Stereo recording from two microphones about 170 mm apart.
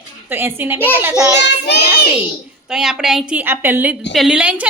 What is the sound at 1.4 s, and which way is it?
Child singing, 80° left.